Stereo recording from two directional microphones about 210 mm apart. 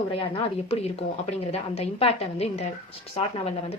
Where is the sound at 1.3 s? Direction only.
30° left (ahead or behind).